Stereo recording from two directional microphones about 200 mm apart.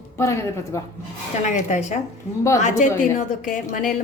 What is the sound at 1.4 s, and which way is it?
Speech, 35° left (ahead or behind).